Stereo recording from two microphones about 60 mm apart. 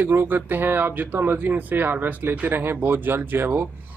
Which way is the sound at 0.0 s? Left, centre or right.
Right.